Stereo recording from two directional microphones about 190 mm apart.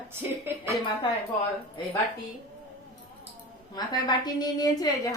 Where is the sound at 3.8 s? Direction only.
20° left (ahead or behind).